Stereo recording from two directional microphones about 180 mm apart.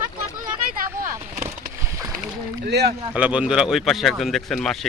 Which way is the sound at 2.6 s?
70° right (ahead or behind).